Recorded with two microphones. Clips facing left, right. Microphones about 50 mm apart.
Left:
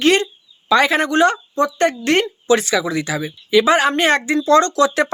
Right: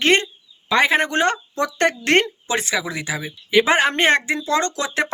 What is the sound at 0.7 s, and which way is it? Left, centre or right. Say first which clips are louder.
Speech: left 2 dB; right.